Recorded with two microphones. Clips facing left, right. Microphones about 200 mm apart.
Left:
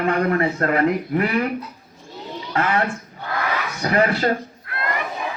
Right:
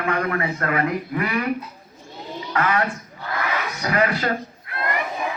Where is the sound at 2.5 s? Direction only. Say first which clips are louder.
Left 1 dB; 30° left (ahead or behind).